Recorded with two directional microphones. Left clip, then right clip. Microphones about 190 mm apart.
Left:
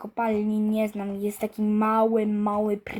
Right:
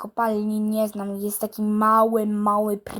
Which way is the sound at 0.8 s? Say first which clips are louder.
Right 3 dB; centre (ahead or behind).